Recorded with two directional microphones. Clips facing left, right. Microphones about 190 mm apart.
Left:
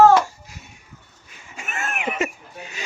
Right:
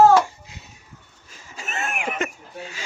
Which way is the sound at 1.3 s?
40° right (ahead or behind).